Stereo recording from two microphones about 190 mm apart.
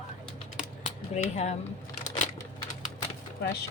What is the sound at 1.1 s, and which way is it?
Speech, 35° left (ahead or behind).